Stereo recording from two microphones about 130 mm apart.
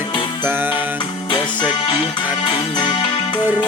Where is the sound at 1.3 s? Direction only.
35° left (ahead or behind).